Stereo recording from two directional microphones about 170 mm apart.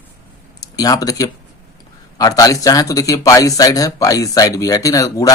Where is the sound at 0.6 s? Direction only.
20° left (ahead or behind).